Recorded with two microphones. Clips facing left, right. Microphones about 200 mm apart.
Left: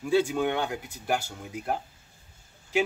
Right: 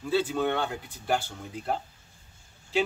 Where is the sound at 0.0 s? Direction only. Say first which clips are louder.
Left 2 dB; 10° left (ahead or behind).